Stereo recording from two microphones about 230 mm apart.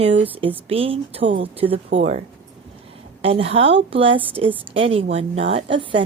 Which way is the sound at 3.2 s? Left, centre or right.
Right.